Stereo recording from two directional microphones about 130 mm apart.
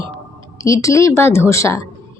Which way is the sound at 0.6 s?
25° left (ahead or behind).